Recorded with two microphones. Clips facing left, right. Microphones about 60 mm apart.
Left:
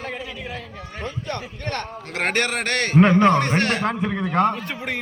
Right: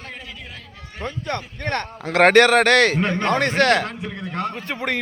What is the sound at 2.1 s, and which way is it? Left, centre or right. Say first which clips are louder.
Speech: right 10 dB; right.